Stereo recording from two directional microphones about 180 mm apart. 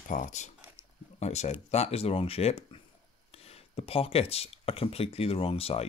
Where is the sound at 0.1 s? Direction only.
45° left (ahead or behind).